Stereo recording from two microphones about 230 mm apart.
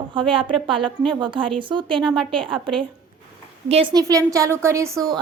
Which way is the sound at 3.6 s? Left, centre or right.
Right.